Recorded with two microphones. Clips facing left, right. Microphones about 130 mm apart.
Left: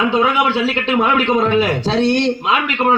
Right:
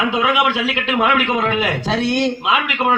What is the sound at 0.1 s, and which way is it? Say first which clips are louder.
A man's voice: left 2 dB; 30° left (ahead or behind).